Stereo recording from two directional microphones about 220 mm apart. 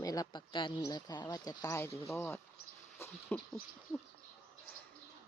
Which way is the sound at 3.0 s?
10° left (ahead or behind).